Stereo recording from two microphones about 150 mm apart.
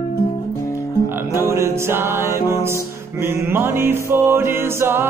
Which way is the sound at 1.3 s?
15° right (ahead or behind).